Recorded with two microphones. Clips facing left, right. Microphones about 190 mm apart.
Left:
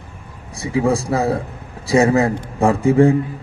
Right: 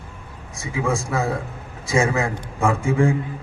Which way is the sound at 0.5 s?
35° left (ahead or behind).